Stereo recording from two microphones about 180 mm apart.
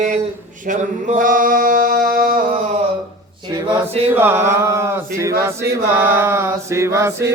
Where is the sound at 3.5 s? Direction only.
20° right (ahead or behind).